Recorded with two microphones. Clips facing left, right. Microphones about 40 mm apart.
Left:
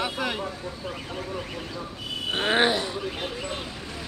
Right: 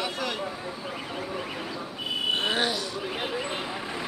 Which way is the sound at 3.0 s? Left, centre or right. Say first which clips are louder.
Right 1 dB; centre.